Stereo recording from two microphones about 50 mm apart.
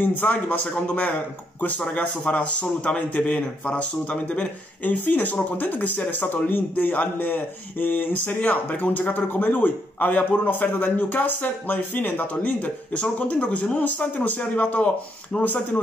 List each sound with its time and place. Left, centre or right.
0.0 s a man's voice: left
2.6 s a man's voice: left
4.8 s speech: left